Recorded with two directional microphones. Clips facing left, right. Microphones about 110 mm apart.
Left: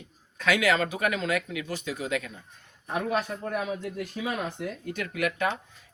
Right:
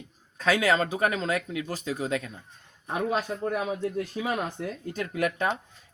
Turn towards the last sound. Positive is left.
turn(degrees=-35)  # may be behind; listen again after turning